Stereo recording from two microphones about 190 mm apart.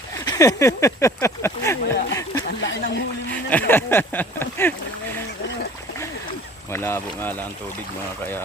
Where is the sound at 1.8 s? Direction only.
60° left (ahead or behind).